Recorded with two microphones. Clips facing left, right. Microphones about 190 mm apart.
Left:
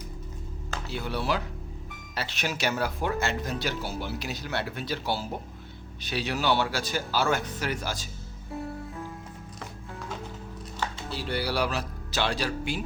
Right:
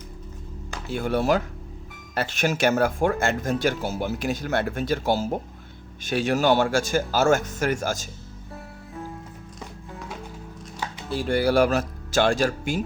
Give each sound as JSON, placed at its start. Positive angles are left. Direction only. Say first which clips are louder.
{"t": 0.9, "sound": "speech", "louder": "right 8 dB", "side_deg": -50}
{"t": 11.1, "sound": "speech", "louder": "right 10 dB", "side_deg": -50}